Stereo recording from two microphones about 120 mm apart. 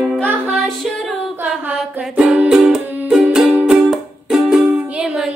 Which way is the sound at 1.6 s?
5° right (ahead or behind).